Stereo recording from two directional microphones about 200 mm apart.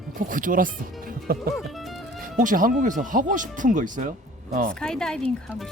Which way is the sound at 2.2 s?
40° right (ahead or behind).